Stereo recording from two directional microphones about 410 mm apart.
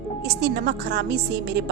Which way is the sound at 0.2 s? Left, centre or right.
Right.